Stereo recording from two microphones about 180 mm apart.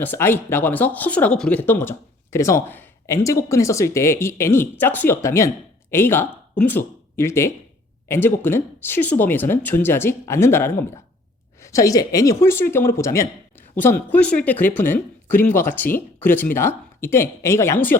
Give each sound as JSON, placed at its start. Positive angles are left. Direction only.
{"t": 0.0, "sound": "speech", "side_deg": 10}